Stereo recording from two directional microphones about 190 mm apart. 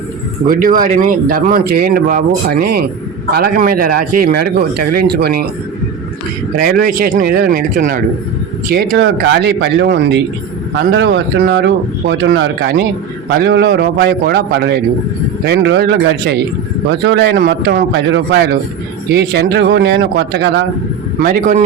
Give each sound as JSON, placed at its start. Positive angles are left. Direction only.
{"t": 0.4, "sound": "speech", "side_deg": -45}
{"t": 6.6, "sound": "speech", "side_deg": -50}
{"t": 8.7, "sound": "speech", "side_deg": -55}
{"t": 21.2, "sound": "speech", "side_deg": -45}